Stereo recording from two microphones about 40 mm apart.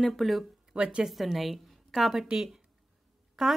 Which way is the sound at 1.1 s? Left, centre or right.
Centre.